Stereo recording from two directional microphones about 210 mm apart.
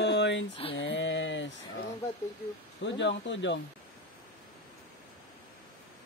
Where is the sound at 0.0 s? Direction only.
55° left (ahead or behind).